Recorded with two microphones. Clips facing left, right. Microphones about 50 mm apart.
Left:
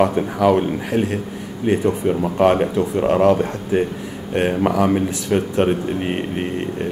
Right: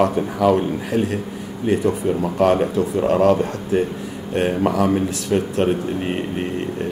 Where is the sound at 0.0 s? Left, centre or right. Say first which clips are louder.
Left 1 dB; left.